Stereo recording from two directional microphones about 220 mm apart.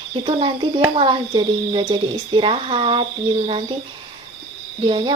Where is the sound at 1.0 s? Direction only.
20° right (ahead or behind).